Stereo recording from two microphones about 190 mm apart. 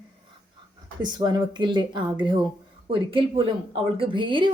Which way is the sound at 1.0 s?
20° right (ahead or behind).